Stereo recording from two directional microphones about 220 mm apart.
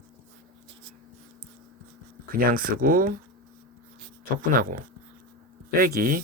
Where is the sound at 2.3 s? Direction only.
40° right (ahead or behind).